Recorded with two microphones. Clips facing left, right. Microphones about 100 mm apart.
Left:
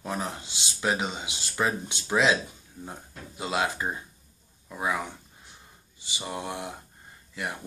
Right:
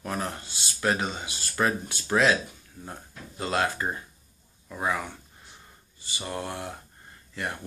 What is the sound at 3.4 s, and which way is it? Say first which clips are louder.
Speech: right 1 dB; 10° left (ahead or behind).